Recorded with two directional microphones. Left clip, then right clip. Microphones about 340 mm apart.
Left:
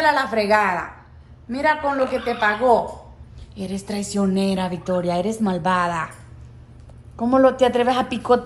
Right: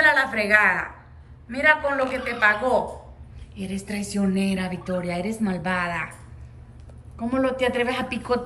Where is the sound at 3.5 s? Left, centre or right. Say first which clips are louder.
Left 3 dB; centre.